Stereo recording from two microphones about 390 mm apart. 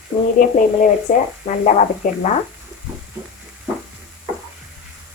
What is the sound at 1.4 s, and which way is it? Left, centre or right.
Speech, centre.